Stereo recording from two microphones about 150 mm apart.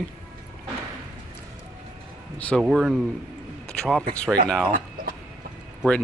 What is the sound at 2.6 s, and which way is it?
Speech, 5° right (ahead or behind).